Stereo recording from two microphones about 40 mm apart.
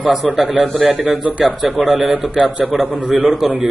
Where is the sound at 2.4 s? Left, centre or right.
Right.